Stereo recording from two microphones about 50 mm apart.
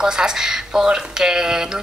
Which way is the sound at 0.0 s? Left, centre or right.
Centre.